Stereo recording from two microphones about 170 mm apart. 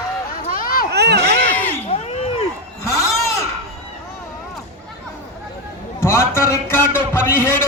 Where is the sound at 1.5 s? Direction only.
10° left (ahead or behind).